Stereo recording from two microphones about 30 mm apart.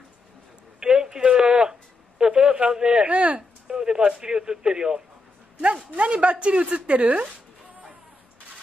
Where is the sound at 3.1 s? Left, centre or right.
Right.